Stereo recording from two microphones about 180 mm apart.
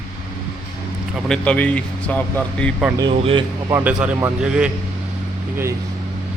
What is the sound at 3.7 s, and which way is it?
Speech, 10° right (ahead or behind).